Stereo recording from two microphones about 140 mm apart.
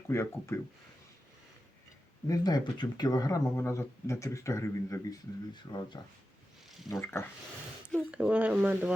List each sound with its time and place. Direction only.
0.1 s speech: 20° left (ahead or behind)
2.2 s speech: 25° left (ahead or behind)
5.7 s speech: 35° left (ahead or behind)
7.0 s speech: 15° left (ahead or behind)
8.1 s speech: 10° right (ahead or behind)